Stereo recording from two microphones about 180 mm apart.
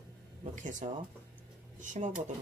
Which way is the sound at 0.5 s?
45° right (ahead or behind).